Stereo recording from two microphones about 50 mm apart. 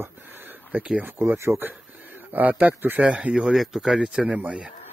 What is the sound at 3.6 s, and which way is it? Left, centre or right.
Speech, centre.